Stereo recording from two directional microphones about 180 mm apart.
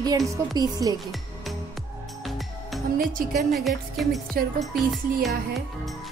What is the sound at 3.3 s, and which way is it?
Speech, centre (ahead or behind).